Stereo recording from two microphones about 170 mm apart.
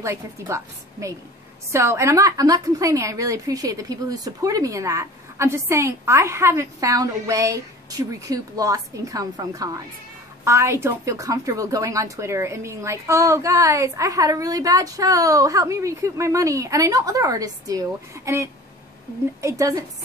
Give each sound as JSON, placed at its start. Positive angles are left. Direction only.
{"t": 0.0, "sound": "a woman's voice", "side_deg": -15}